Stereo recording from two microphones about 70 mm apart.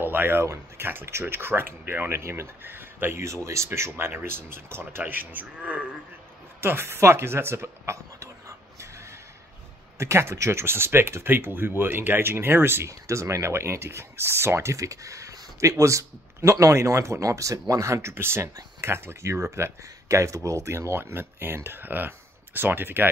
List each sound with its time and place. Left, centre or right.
0.0 s speech: right
6.6 s a sound: right
9.9 s speech: right
13.0 s speech: right